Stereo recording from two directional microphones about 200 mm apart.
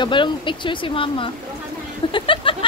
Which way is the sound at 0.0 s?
25° left (ahead or behind).